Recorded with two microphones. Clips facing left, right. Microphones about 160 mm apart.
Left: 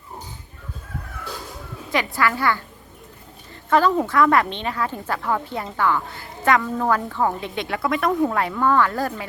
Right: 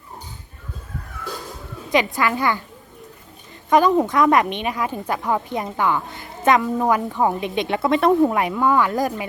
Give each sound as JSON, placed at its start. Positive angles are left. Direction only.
{"t": 1.9, "sound": "speech", "side_deg": -20}
{"t": 3.7, "sound": "a woman's voice", "side_deg": -15}
{"t": 8.2, "sound": "a woman's voice", "side_deg": -15}